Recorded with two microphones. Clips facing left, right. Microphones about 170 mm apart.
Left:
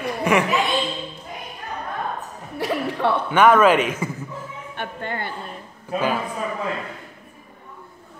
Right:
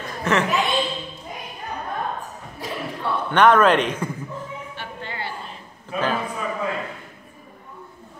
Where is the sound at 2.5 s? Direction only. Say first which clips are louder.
Left 7 dB; 70° left (ahead or behind).